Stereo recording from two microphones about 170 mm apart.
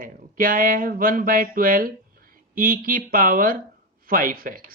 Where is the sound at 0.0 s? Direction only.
55° right (ahead or behind).